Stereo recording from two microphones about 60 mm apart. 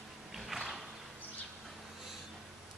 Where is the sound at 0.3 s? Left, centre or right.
Centre.